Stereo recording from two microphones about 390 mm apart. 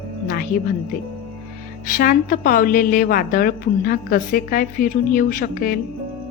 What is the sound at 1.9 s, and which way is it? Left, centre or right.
A woman's voice, left.